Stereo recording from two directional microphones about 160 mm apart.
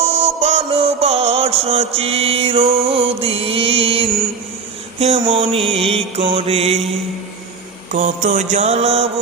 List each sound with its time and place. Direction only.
0.1 s music: 40° right (ahead or behind)
4.9 s a sound: 40° right (ahead or behind)
5.2 s music: 35° right (ahead or behind)
7.9 s mantra: 50° right (ahead or behind)